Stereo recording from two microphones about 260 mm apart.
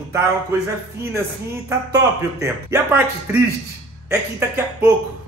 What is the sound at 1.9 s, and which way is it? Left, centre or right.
Speech, centre.